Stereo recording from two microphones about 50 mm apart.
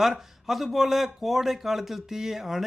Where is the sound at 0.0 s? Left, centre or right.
Centre.